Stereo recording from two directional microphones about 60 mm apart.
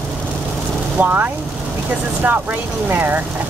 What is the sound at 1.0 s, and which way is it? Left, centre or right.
Speech, right.